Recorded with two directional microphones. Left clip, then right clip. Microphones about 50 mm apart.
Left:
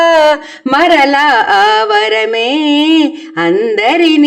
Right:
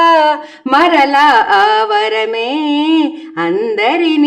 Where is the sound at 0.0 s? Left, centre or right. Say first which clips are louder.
Left 2 dB; left.